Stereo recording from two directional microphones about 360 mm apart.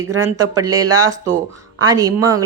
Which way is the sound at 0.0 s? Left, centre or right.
Right.